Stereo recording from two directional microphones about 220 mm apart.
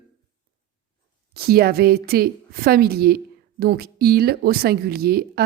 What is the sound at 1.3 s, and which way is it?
A woman's voice, 45° right (ahead or behind).